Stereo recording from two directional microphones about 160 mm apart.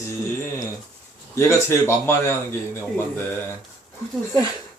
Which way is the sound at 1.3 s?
15° left (ahead or behind).